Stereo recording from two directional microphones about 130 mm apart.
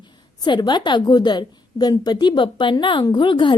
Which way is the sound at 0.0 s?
35° left (ahead or behind).